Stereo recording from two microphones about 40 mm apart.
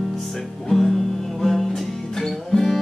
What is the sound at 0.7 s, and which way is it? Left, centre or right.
Music, centre.